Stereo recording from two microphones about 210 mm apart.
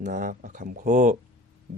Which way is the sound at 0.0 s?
40° right (ahead or behind).